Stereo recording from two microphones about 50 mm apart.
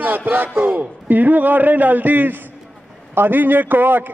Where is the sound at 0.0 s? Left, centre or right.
Right.